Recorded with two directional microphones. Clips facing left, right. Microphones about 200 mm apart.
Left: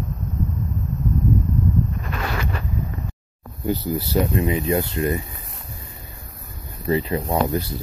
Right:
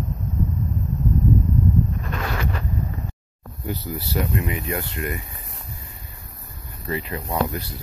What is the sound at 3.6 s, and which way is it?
Speech, 25° left (ahead or behind).